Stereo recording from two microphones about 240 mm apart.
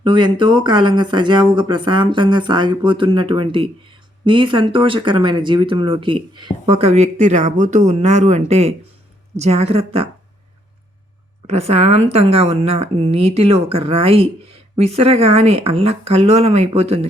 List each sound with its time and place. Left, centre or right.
0.0 s speech: centre
11.4 s speech: right